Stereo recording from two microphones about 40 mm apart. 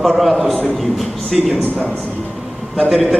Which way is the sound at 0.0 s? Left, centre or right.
Centre.